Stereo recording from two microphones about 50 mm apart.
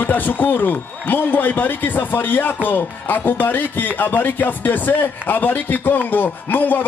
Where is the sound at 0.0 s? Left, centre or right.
Left.